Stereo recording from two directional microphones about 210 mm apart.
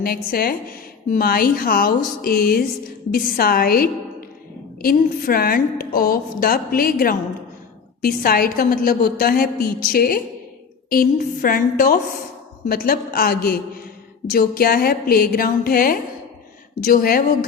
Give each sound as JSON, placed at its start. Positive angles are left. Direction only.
{"t": 0.0, "sound": "a woman's voice", "side_deg": 45}